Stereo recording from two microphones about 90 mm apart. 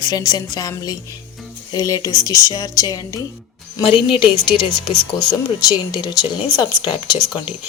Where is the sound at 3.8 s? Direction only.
70° left (ahead or behind).